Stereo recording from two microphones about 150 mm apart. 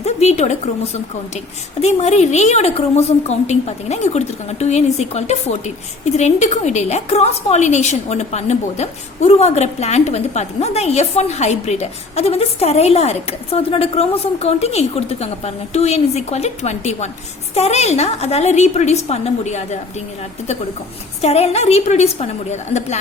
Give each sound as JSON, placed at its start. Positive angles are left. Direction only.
{"t": 0.0, "sound": "a sound", "side_deg": 45}
{"t": 1.8, "sound": "a woman's voice", "side_deg": 45}
{"t": 21.2, "sound": "a woman's voice", "side_deg": 45}